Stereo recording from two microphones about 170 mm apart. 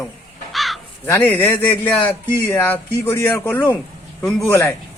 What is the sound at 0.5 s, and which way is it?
Crow, centre (ahead or behind).